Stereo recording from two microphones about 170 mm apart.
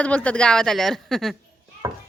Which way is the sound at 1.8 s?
20° right (ahead or behind).